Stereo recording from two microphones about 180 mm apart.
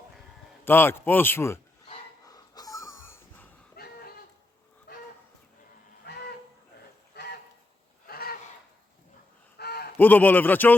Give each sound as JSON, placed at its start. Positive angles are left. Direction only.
{"t": 0.6, "sound": "speech", "side_deg": 10}
{"t": 2.2, "sound": "wheeze", "side_deg": 20}
{"t": 3.8, "sound": "a sound", "side_deg": 60}
{"t": 8.0, "sound": "a sound", "side_deg": 55}
{"t": 9.6, "sound": "honk", "side_deg": 60}
{"t": 10.0, "sound": "speech", "side_deg": 10}